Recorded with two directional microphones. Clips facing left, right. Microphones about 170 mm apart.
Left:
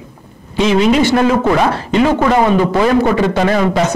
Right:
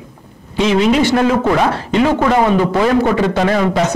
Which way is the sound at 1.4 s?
20° left (ahead or behind).